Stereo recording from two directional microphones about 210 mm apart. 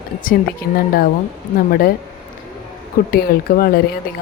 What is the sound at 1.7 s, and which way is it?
Speech, 45° left (ahead or behind).